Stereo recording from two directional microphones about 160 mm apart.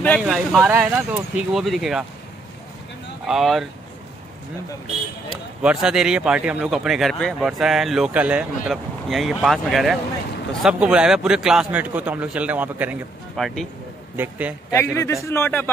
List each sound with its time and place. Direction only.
0.2 s speech: centre (ahead or behind)
3.3 s speech: centre (ahead or behind)
5.3 s a man's voice: 5° right (ahead or behind)
13.4 s speech: centre (ahead or behind)
14.1 s a man's voice: 10° right (ahead or behind)
14.7 s a man's voice: 15° left (ahead or behind)